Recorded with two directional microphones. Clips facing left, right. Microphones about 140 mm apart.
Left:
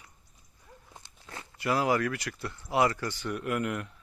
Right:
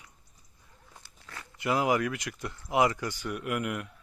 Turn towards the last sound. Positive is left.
turn(degrees=-10)  # may be behind; listen again after turning